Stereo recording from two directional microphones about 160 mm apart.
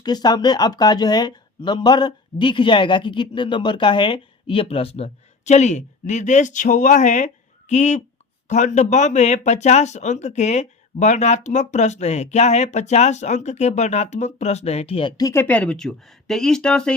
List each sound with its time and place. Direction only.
0.0 s speech: 25° left (ahead or behind)
15.2 s speech: 15° left (ahead or behind)